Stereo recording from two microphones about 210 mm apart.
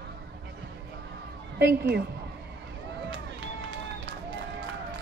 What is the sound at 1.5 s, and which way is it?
Speech, 50° right (ahead or behind).